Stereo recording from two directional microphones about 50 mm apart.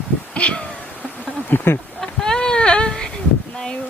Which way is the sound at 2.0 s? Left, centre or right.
Centre.